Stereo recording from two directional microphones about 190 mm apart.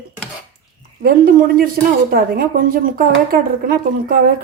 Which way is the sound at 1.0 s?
50° right (ahead or behind).